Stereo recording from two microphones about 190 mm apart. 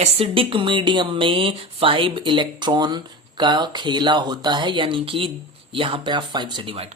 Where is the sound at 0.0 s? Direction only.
30° right (ahead or behind).